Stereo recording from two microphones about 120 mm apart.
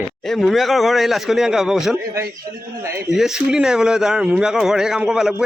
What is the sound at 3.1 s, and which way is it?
Speech, 5° right (ahead or behind).